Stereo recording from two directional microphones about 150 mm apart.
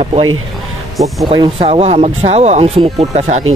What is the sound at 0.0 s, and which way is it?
Speech, 40° right (ahead or behind).